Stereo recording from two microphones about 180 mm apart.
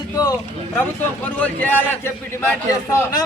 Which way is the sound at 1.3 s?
10° left (ahead or behind).